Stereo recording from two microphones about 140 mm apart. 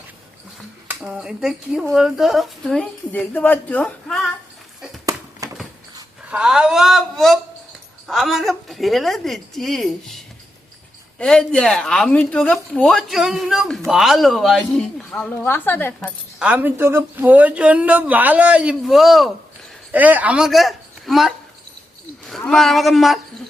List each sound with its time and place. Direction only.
0.9 s speech: 5° right (ahead or behind); by 4.2 s 10° left (ahead or behind)
5.4 s a sound: 25° right (ahead or behind)
6.3 s speech: 5° right (ahead or behind); by 16.0 s 15° left (ahead or behind)
16.4 s a man's voice: 10° right (ahead or behind)